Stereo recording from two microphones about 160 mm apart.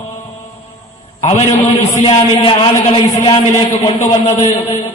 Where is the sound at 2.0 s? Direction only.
35° left (ahead or behind).